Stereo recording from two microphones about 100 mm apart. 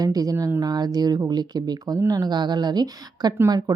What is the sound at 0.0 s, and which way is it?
Speech, 40° right (ahead or behind).